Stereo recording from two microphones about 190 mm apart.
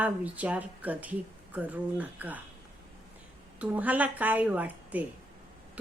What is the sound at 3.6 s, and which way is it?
Speech, 10° right (ahead or behind).